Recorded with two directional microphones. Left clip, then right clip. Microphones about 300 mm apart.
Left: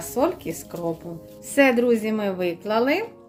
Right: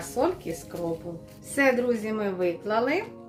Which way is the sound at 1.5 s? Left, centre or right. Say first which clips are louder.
Left 5 dB; left.